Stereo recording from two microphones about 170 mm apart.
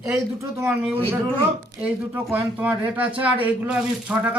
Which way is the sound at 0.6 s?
15° right (ahead or behind).